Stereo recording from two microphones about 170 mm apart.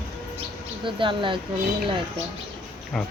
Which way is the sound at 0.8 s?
30° right (ahead or behind).